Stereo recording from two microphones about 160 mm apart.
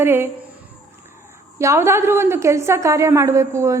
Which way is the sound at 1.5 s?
15° right (ahead or behind).